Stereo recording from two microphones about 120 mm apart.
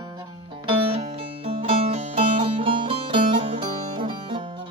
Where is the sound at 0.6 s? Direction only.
50° right (ahead or behind).